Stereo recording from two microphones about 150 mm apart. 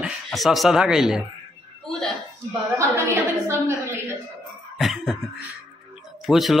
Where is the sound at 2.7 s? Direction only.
20° right (ahead or behind).